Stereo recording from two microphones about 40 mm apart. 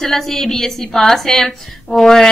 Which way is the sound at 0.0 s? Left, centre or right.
Centre.